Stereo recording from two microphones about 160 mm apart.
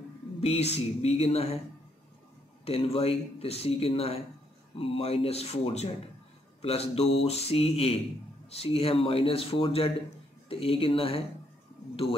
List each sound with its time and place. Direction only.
0.4 s speech: 40° left (ahead or behind)
2.6 s speech: 40° left (ahead or behind)